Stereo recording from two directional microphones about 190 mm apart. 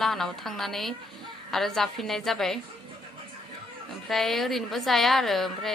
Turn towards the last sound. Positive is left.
turn(degrees=0)  # may be behind; listen again after turning